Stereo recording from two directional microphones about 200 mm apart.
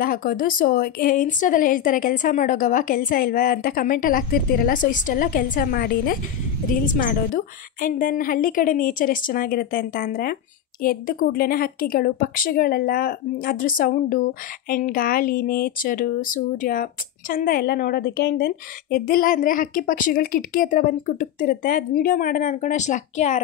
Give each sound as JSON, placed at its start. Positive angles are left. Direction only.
{"t": 0.0, "sound": "speech", "side_deg": 45}